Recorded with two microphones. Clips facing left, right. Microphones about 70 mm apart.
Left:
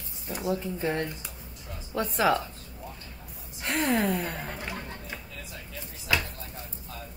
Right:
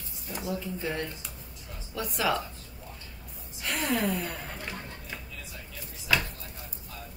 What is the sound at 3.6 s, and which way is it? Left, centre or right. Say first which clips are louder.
Speech: left 3 dB; left.